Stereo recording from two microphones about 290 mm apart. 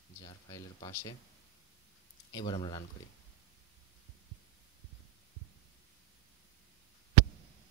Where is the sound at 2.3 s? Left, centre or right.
Centre.